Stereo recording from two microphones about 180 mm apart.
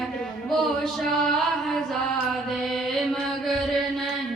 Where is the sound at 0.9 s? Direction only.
Centre (ahead or behind).